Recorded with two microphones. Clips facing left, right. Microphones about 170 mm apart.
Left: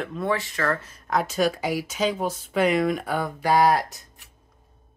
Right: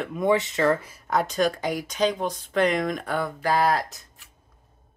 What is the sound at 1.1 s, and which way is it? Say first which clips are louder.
Speech: even; 5° left (ahead or behind).